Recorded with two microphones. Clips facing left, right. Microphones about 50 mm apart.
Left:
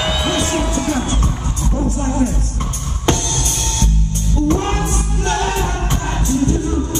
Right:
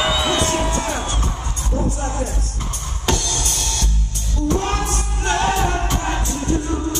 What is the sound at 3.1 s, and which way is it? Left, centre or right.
Music, left.